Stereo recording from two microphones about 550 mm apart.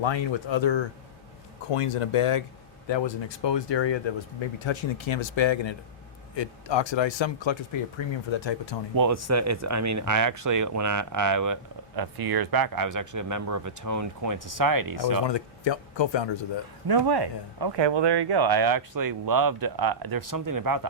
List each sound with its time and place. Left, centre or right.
0.0 s speech: left
1.7 s speech: left
2.8 s speech: left
9.0 s speech: right
15.3 s speech: left
16.8 s speech: right